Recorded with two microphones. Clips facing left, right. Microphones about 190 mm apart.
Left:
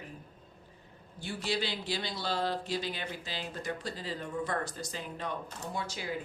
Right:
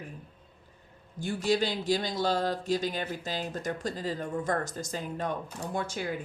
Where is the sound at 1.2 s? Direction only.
45° right (ahead or behind).